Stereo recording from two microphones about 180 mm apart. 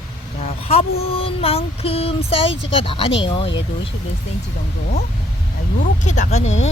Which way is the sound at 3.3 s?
30° left (ahead or behind).